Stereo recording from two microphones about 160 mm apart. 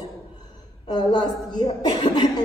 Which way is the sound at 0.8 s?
25° left (ahead or behind).